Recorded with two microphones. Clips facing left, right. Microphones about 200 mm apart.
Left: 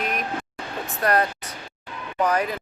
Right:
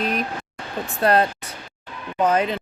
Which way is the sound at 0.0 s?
30° right (ahead or behind).